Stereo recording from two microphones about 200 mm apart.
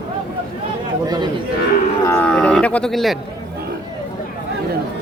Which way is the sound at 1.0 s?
20° right (ahead or behind).